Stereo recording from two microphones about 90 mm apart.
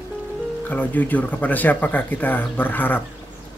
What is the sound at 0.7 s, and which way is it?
Speech, 20° left (ahead or behind).